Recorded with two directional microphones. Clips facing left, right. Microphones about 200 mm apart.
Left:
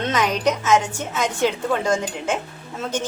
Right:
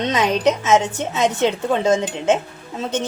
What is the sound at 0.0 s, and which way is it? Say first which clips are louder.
A woman's voice: right 3 dB; 20° right (ahead or behind).